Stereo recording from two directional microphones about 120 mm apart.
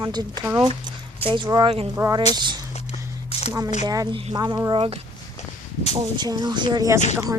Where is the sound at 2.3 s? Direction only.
40° right (ahead or behind).